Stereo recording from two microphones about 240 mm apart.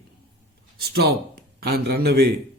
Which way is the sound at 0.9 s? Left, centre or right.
Right.